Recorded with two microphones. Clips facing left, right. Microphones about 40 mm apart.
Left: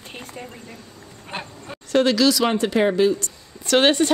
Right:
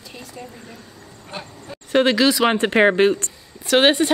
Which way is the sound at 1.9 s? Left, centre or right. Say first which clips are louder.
Right 1 dB; right.